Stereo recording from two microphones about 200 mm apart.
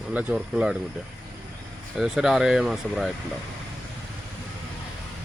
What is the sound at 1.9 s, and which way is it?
Speech, 5° right (ahead or behind).